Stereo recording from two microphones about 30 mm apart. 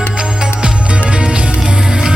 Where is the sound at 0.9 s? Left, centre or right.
Right.